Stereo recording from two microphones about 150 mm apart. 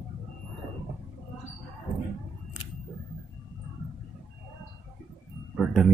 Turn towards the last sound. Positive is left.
turn(degrees=-5)  # may be behind; listen again after turning